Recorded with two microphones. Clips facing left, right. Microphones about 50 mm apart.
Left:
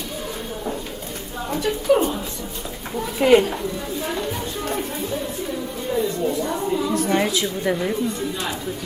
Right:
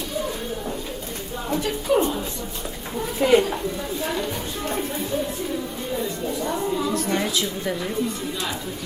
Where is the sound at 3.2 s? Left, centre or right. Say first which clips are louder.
Left 3 dB; left.